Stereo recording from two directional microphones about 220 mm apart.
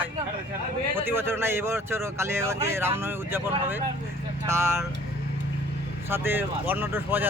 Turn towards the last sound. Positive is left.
turn(degrees=-10)  # may be behind; listen again after turning